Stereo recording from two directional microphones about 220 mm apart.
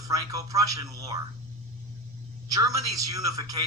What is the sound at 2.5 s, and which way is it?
A man's voice, 15° right (ahead or behind).